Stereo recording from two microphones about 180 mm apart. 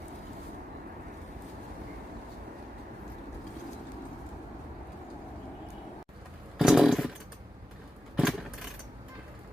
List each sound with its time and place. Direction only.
6.6 s chainsaw: centre (ahead or behind)
8.1 s keys jangling: centre (ahead or behind)